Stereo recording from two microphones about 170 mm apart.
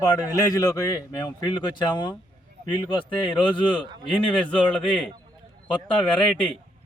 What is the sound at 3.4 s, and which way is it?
Speech, 30° left (ahead or behind).